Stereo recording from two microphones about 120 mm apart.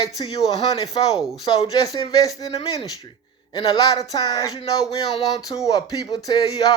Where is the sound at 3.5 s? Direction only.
35° left (ahead or behind).